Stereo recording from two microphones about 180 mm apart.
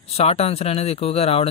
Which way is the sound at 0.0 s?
35° left (ahead or behind).